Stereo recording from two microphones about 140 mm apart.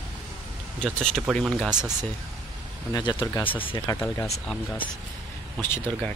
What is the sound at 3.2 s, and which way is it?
Speech, 15° left (ahead or behind).